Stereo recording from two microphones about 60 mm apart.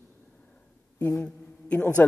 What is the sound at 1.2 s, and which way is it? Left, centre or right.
Speech, left.